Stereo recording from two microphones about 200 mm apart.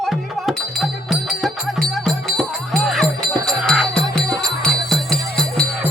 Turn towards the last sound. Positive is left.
turn(degrees=5)  # may be behind; listen again after turning